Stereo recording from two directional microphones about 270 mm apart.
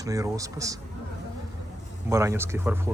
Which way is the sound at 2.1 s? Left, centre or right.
Centre.